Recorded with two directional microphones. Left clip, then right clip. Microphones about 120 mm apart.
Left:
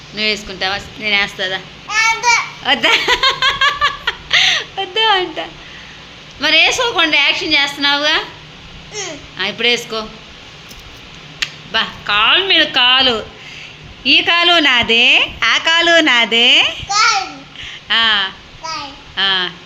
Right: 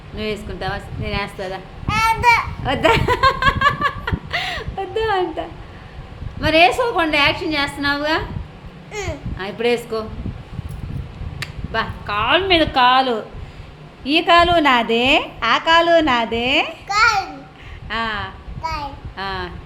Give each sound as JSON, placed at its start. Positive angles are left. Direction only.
{"t": 0.2, "sound": "a woman's voice", "side_deg": -5}
{"t": 2.0, "sound": "a child's voice", "side_deg": -70}
{"t": 2.6, "sound": "a woman's voice", "side_deg": -10}
{"t": 9.4, "sound": "a woman's voice", "side_deg": -10}
{"t": 11.3, "sound": "a woman's voice", "side_deg": -10}
{"t": 17.6, "sound": "a sound", "side_deg": -5}
{"t": 19.1, "sound": "a woman's voice", "side_deg": -5}